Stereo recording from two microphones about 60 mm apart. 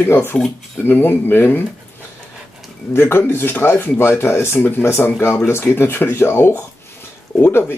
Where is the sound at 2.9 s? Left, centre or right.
Left.